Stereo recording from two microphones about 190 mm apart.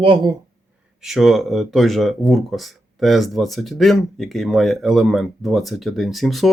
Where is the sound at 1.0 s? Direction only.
Centre (ahead or behind).